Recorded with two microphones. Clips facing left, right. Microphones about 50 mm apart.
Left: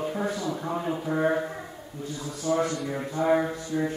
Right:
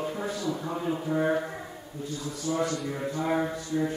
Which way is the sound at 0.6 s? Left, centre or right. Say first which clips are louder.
Left 1 dB; centre.